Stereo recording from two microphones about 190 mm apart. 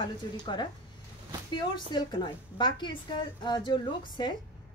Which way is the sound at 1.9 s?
25° left (ahead or behind).